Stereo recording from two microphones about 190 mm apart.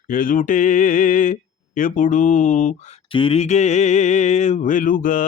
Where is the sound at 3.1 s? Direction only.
30° left (ahead or behind).